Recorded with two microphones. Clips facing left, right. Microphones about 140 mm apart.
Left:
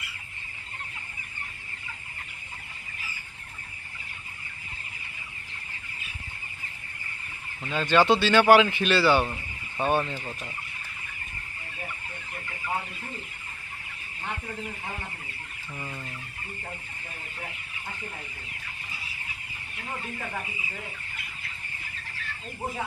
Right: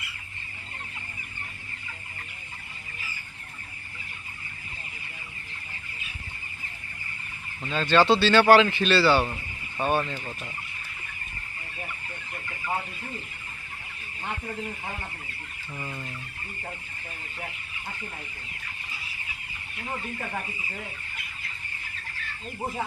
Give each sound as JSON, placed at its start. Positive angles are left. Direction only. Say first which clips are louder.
{"t": 7.6, "sound": "speech", "louder": "right 1 dB", "side_deg": 15}